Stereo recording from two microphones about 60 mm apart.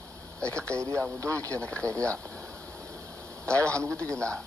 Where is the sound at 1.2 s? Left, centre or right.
Right.